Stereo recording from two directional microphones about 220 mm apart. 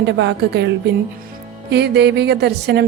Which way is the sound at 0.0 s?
55° right (ahead or behind).